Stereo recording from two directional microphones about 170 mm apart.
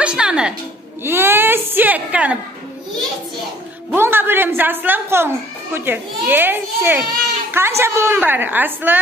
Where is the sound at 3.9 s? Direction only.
10° right (ahead or behind).